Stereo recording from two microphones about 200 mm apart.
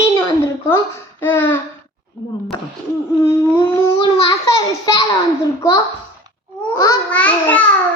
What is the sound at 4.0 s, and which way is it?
A child's voice, 20° left (ahead or behind).